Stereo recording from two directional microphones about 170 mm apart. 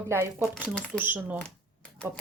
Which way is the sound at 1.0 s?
10° right (ahead or behind).